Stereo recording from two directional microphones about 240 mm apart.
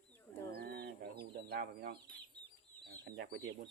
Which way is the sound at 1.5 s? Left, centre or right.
Right.